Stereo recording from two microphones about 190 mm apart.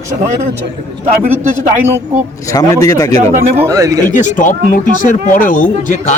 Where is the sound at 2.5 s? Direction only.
20° left (ahead or behind).